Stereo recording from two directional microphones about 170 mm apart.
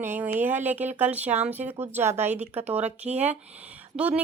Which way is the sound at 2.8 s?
40° right (ahead or behind).